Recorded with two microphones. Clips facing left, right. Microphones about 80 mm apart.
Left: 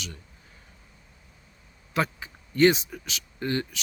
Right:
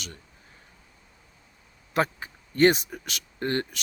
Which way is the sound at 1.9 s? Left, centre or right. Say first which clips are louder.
Right 2 dB; right.